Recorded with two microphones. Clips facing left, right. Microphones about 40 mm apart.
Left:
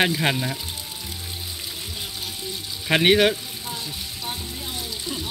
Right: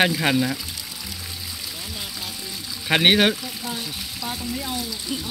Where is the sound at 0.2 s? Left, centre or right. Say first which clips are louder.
Right 3 dB; centre.